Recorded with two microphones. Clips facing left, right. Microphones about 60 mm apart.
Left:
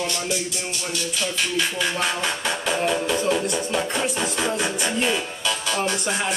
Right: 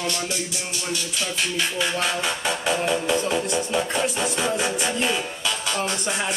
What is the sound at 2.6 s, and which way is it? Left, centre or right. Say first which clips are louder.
Music: even; centre.